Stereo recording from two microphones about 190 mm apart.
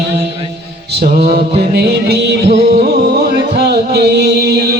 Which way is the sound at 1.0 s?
55° right (ahead or behind).